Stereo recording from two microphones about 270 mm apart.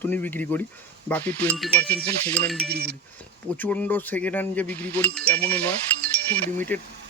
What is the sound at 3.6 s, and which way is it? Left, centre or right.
Speech, centre.